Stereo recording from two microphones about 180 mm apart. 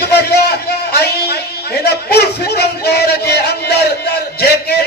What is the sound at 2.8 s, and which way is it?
Music, 60° left (ahead or behind).